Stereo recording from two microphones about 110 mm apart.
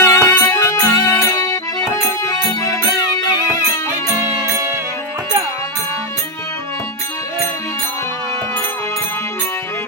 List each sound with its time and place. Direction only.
0.0 s music: 25° left (ahead or behind)
0.5 s music: 30° left (ahead or behind)